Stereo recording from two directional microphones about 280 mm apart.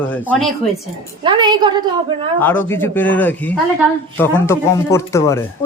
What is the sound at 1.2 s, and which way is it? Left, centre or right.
Speech, centre.